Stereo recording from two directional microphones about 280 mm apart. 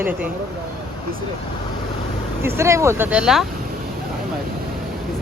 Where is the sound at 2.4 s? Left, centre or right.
Centre.